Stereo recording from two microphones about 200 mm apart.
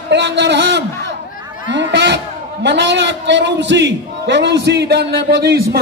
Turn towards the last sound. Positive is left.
turn(degrees=-55)  # may be behind; listen again after turning